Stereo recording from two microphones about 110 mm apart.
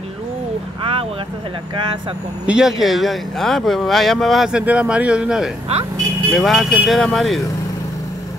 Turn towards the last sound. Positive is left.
turn(degrees=0)  # may be behind; listen again after turning